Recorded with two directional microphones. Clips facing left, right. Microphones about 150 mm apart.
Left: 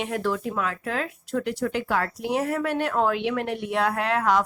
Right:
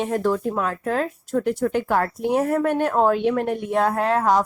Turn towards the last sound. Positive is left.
turn(degrees=-40)  # may be behind; listen again after turning